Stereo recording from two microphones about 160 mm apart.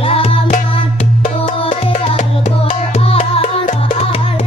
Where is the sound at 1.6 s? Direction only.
35° left (ahead or behind).